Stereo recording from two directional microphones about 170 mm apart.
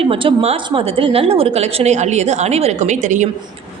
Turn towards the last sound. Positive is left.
turn(degrees=-45)  # may be behind; listen again after turning